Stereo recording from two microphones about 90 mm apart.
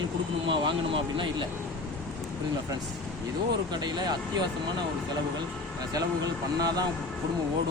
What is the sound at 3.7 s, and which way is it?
Speech, 55° right (ahead or behind).